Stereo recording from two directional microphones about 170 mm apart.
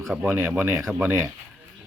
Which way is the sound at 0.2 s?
10° right (ahead or behind).